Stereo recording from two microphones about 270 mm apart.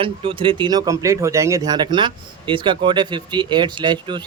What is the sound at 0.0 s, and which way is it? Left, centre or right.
Speech, centre.